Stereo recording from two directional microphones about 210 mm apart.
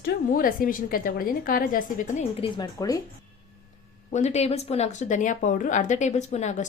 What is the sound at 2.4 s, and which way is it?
Speech, 20° left (ahead or behind).